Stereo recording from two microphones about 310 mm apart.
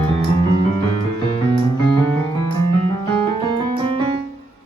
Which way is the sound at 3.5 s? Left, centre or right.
Centre.